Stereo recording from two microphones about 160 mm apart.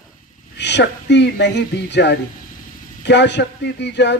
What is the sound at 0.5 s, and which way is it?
Speech, 90° left.